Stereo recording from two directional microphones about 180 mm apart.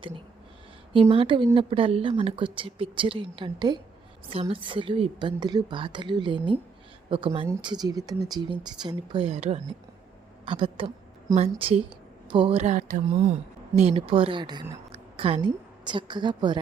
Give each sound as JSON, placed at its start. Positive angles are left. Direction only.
{"t": 1.1, "sound": "a woman's voice", "side_deg": -30}